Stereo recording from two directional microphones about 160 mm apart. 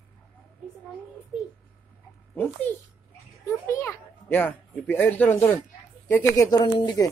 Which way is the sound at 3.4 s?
20° left (ahead or behind).